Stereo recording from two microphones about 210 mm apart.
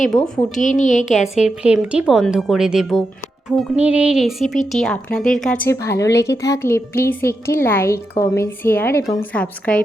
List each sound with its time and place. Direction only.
0.6 s a woman's voice: 35° left (ahead or behind)
1.5 s a woman's voice: 5° right (ahead or behind)
5.6 s a woman's voice: 15° left (ahead or behind)
9.3 s a woman's voice: 5° left (ahead or behind)